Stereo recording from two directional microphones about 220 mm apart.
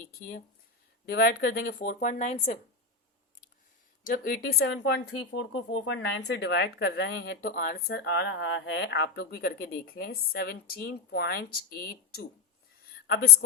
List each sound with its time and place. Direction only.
1.0 s speech: 45° left (ahead or behind); by 2.6 s 30° left (ahead or behind)
4.0 s speech: 40° left (ahead or behind)
4.6 s speech: 55° left (ahead or behind)